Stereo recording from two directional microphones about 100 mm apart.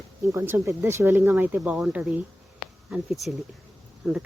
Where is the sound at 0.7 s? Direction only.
30° right (ahead or behind).